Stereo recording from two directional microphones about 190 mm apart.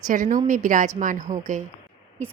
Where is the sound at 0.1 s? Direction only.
45° right (ahead or behind).